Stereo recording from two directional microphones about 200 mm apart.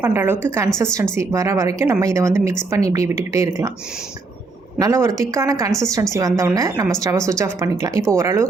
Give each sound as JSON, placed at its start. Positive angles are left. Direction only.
{"t": 0.0, "sound": "a woman's voice", "side_deg": -10}
{"t": 4.8, "sound": "a woman's voice", "side_deg": -15}